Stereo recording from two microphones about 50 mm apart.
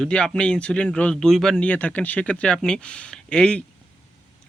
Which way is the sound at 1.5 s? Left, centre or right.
Left.